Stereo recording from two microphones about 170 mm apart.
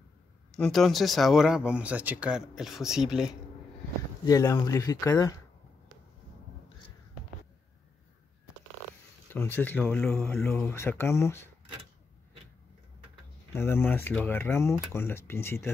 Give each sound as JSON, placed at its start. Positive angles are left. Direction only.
{"t": 0.5, "sound": "speech", "side_deg": 0}
{"t": 4.3, "sound": "speech", "side_deg": 20}
{"t": 9.3, "sound": "speech", "side_deg": 10}
{"t": 13.5, "sound": "speech", "side_deg": 15}